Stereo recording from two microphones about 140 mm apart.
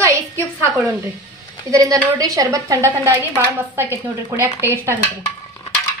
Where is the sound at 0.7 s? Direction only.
15° right (ahead or behind).